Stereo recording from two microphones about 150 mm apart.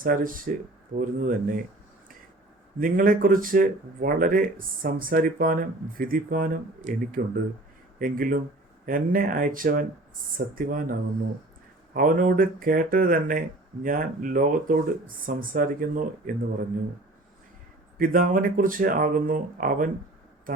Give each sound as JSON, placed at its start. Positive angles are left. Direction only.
{"t": 0.0, "sound": "speech", "side_deg": -70}
{"t": 2.8, "sound": "speech", "side_deg": -65}
{"t": 11.9, "sound": "speech", "side_deg": -65}
{"t": 17.9, "sound": "speech", "side_deg": -70}